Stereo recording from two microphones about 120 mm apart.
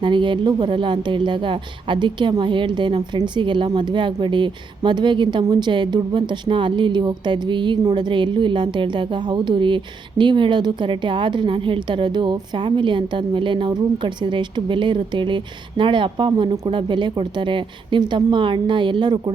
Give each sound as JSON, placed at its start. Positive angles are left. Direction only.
{"t": 0.0, "sound": "a woman's voice", "side_deg": -40}